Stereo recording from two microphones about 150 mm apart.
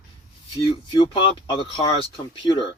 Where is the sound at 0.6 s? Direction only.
30° left (ahead or behind).